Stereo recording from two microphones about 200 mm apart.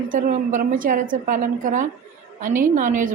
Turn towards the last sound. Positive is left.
turn(degrees=-40)  # may be behind; listen again after turning